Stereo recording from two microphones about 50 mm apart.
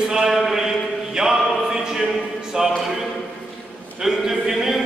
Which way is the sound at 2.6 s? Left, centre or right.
Centre.